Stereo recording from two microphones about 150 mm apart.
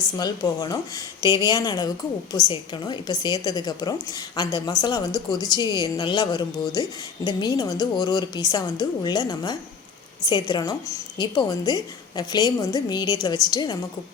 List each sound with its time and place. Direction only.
0.2 s a woman's voice: 25° left (ahead or behind)